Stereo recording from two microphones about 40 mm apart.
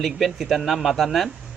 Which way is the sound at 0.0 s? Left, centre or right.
Centre.